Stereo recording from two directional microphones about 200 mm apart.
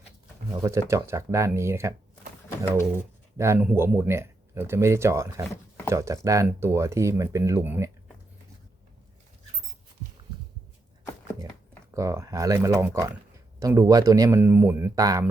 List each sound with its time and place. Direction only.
0.5 s speech: 15° right (ahead or behind)
3.3 s speech: 15° right (ahead or behind)
11.9 s speech: 15° right (ahead or behind)